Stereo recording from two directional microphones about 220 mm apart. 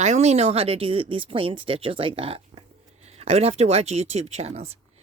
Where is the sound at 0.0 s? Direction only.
30° right (ahead or behind).